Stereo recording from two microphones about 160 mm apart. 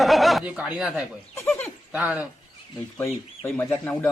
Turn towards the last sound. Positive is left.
turn(degrees=10)  # may be behind; listen again after turning